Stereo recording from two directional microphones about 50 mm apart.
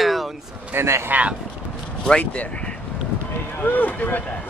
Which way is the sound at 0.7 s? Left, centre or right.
Right.